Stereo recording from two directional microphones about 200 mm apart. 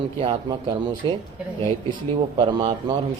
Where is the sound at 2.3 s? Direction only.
25° right (ahead or behind).